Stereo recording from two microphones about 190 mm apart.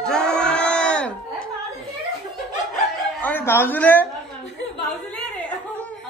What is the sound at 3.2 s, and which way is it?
Speech, 10° left (ahead or behind).